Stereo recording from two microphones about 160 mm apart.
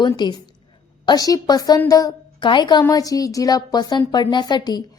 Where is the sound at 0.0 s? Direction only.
25° left (ahead or behind).